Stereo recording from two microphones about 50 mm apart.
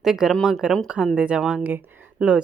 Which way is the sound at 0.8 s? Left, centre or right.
Centre.